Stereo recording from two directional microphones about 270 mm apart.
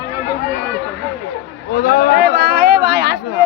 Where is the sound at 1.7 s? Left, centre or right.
Left.